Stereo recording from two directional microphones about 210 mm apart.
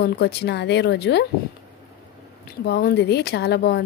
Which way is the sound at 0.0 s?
50° left (ahead or behind).